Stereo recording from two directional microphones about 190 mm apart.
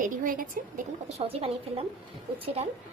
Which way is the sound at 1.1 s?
30° right (ahead or behind).